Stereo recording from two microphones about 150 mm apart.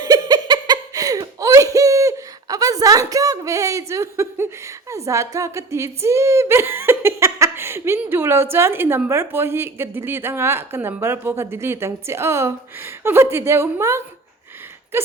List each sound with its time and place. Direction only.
0.0 s giggle: 25° right (ahead or behind)
8.5 s a woman's voice: 15° right (ahead or behind)
14.9 s a sound: 15° right (ahead or behind)